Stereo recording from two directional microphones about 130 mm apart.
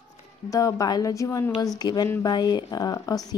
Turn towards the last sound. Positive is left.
turn(degrees=30)  # may be behind; listen again after turning